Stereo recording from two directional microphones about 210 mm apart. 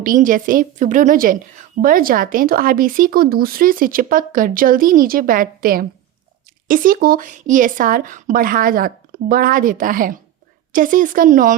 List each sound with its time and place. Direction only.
0.0 s a woman's voice: 40° right (ahead or behind)